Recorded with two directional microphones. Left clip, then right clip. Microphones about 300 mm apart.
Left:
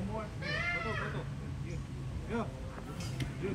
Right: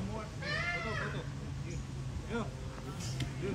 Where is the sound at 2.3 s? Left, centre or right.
Centre.